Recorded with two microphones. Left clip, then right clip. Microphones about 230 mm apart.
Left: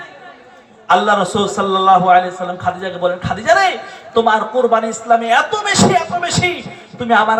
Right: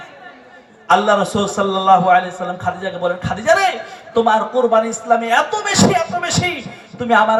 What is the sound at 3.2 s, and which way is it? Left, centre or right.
Speech, right.